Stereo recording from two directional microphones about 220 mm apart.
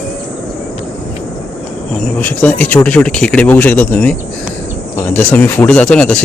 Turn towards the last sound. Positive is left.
turn(degrees=5)  # may be behind; listen again after turning